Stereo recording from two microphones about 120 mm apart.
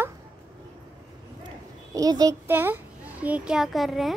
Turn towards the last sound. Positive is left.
turn(degrees=0)  # may be behind; listen again after turning